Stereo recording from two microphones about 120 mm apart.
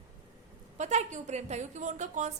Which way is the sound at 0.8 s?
75° right (ahead or behind).